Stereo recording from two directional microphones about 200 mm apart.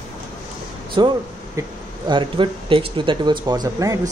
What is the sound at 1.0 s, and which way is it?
Speech, 20° right (ahead or behind).